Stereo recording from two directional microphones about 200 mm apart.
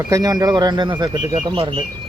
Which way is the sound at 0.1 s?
20° right (ahead or behind).